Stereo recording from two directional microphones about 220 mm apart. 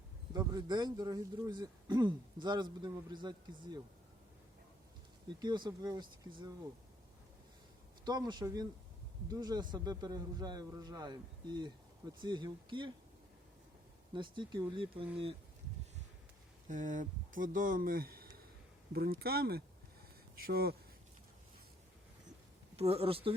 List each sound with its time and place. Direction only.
0.3 s a man's voice: 20° right (ahead or behind)
5.4 s a man's voice: 20° right (ahead or behind)
8.0 s a man's voice: 20° right (ahead or behind)
14.1 s a man's voice: 20° right (ahead or behind)
16.6 s speech: 35° right (ahead or behind)
22.8 s a man's voice: 25° right (ahead or behind)